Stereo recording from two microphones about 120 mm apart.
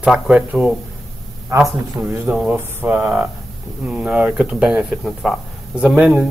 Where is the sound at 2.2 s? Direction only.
5° right (ahead or behind).